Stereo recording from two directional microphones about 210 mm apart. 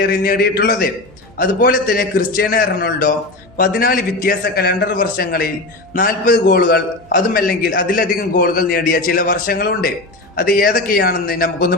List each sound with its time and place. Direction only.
0.0 s a man's voice: 45° left (ahead or behind)